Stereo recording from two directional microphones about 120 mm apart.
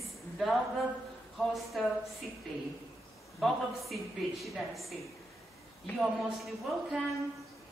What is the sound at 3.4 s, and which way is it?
A woman's voice, centre (ahead or behind).